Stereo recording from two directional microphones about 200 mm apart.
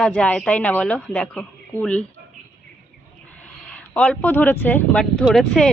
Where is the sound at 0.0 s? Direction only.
5° left (ahead or behind).